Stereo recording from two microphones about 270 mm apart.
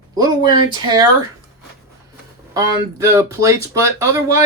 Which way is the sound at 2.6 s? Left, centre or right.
Centre.